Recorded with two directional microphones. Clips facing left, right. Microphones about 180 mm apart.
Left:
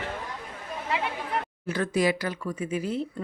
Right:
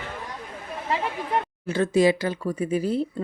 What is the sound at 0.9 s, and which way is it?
A woman's voice, 35° right (ahead or behind).